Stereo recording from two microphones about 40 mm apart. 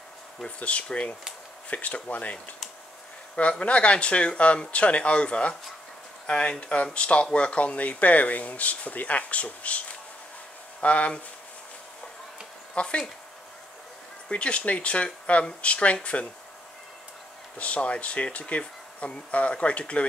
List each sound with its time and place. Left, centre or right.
0.6 s speech: left
1.7 s speech: left
3.3 s speech: left
10.8 s speech: left
12.7 s speech: left
14.3 s speech: left
17.6 s speech: left